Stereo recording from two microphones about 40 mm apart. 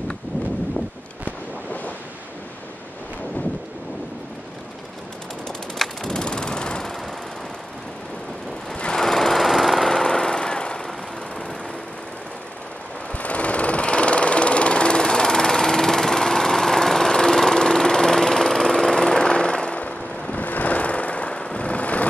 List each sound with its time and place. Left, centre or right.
5.8 s rain: centre
6.1 s a sound: centre
8.9 s vehicle: centre
9.8 s vehicle: centre
13.1 s vehicle: left
19.8 s vehicle: left